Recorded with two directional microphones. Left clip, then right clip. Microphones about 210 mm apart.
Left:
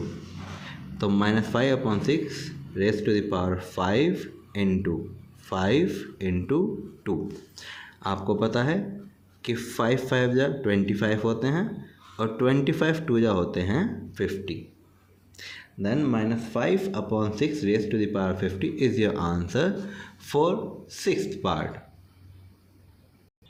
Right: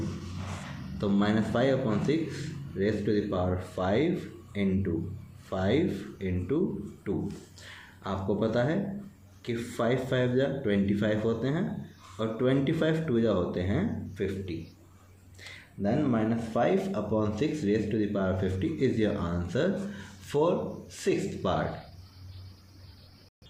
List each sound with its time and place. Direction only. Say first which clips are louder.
0.9 s speech: left 3 dB; 40° left (ahead or behind)